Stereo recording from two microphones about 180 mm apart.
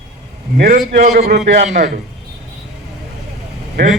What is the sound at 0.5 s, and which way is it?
Speech, 55° right (ahead or behind).